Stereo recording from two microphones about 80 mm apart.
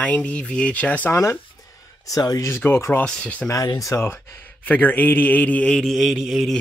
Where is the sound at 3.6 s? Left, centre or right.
Left; by 5.8 s centre.